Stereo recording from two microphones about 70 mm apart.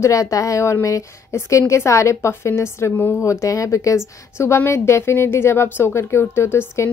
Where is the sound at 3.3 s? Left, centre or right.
Left.